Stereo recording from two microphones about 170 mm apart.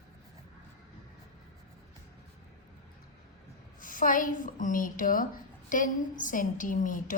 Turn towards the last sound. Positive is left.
turn(degrees=50)  # may be behind; listen again after turning